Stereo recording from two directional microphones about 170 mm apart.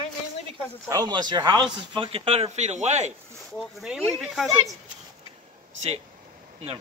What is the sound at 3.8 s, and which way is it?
Speech, 5° right (ahead or behind).